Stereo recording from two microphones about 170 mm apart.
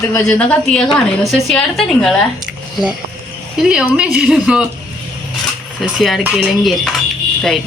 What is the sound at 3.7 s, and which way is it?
Speech, 5° right (ahead or behind).